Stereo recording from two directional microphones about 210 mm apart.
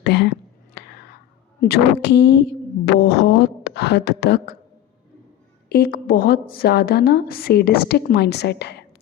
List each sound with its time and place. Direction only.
0.0 s whispering: 55° left (ahead or behind)
1.6 s speech: 50° left (ahead or behind)
5.6 s a woman's voice: 50° left (ahead or behind)